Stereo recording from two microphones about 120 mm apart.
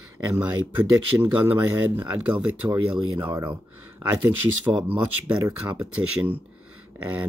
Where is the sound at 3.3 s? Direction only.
40° right (ahead or behind).